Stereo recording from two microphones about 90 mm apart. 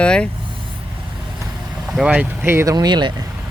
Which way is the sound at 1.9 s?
10° right (ahead or behind).